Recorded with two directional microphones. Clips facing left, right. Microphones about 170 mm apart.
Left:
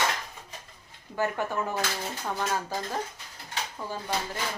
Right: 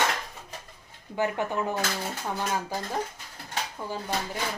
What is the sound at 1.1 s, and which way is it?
Speech, 15° right (ahead or behind).